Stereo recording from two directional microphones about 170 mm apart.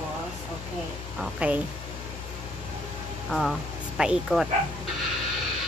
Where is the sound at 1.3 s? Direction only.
10° right (ahead or behind).